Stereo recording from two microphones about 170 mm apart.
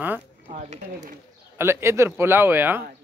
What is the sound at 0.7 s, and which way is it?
Speech, 45° right (ahead or behind).